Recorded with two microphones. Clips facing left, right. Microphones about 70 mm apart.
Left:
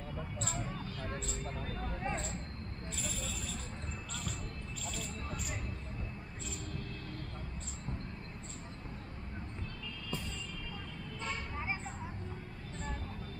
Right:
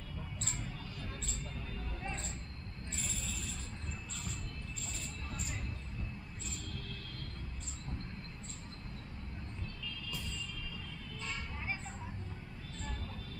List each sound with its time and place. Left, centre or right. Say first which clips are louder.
0.4 s vehicle: left 6 dB; left
11.2 s vehicle: left 3 dB; left